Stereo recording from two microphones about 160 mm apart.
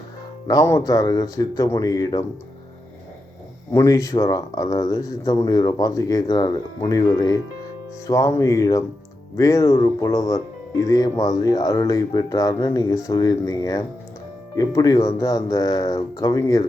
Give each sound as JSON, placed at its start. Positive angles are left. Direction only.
{"t": 0.4, "sound": "speech", "side_deg": 20}
{"t": 3.7, "sound": "speech", "side_deg": 20}